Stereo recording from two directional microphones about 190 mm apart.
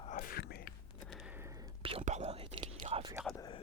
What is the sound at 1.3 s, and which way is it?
Whispering, 15° right (ahead or behind).